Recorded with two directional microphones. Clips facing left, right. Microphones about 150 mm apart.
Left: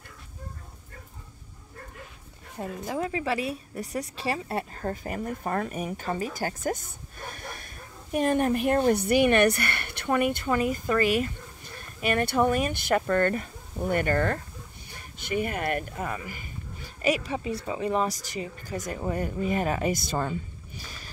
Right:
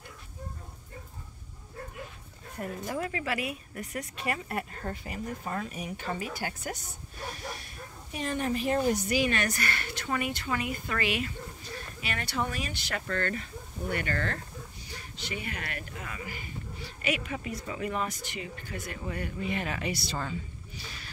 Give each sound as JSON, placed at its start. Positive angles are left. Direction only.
{"t": 2.6, "sound": "speech", "side_deg": 25}
{"t": 4.9, "sound": "speech", "side_deg": 45}
{"t": 15.1, "sound": "speech", "side_deg": 50}